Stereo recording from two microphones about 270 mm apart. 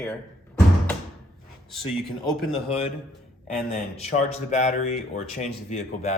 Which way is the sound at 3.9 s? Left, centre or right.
Left.